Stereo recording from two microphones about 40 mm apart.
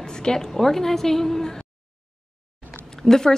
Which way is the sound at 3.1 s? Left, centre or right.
Centre.